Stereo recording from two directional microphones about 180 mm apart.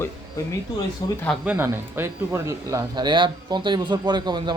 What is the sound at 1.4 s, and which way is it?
Speech, 10° right (ahead or behind).